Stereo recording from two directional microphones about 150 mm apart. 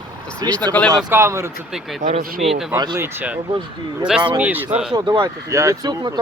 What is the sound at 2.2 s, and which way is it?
Speech, 70° right (ahead or behind).